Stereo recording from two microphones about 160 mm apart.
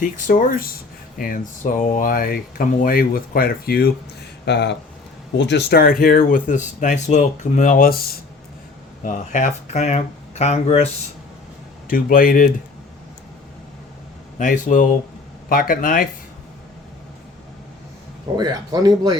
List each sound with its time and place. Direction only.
0.0 s speech: 55° left (ahead or behind)
4.4 s speech: 90° left; by 7.9 s 60° left (ahead or behind)
9.0 s speech: 50° left (ahead or behind)
11.9 s speech: 60° left (ahead or behind)
14.3 s speech: 55° left (ahead or behind)
18.3 s speech: 25° right (ahead or behind)